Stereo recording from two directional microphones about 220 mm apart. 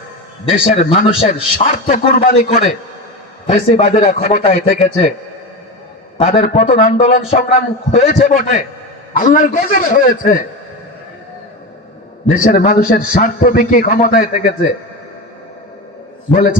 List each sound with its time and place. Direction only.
0.4 s a man's voice: 25° left (ahead or behind)
4.4 s speech: 25° left (ahead or behind)
6.1 s a man's voice: 30° left (ahead or behind)
12.2 s a man's voice: 40° left (ahead or behind)